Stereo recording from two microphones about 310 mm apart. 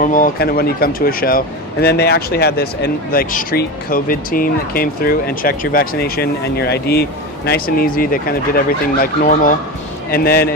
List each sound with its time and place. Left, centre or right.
0.0 s speech: left